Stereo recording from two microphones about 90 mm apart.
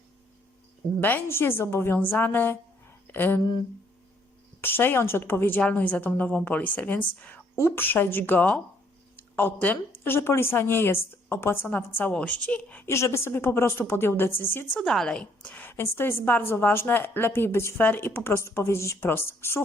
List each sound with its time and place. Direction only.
1.0 s a woman's voice: 25° left (ahead or behind)
4.6 s a woman's voice: 25° left (ahead or behind)
7.5 s a woman's voice: 25° left (ahead or behind)
9.1 s a sound: 20° left (ahead or behind)
10.0 s a woman's voice: 25° left (ahead or behind)
12.8 s a woman's voice: 30° left (ahead or behind)
14.8 s a woman's voice: 5° left (ahead or behind); by 19.6 s 30° left (ahead or behind)